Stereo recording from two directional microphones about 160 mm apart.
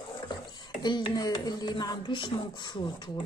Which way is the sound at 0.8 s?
25° left (ahead or behind).